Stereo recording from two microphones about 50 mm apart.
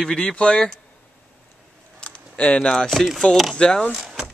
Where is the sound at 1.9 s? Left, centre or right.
Left.